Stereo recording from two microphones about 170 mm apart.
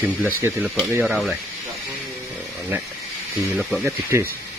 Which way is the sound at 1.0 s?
Centre (ahead or behind).